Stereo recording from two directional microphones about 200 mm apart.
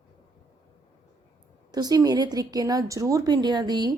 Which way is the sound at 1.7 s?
20° right (ahead or behind).